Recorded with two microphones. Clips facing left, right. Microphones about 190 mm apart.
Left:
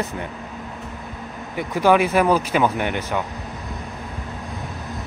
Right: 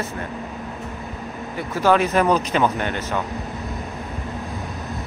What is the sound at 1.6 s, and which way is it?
Speech, 15° left (ahead or behind).